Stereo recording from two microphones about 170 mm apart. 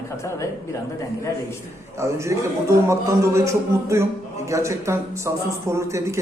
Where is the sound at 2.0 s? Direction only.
15° right (ahead or behind).